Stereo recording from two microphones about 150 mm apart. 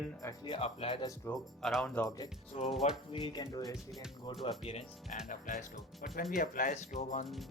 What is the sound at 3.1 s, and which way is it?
Speech, 35° left (ahead or behind).